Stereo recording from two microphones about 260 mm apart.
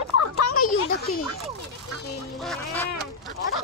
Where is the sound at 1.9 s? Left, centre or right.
Centre.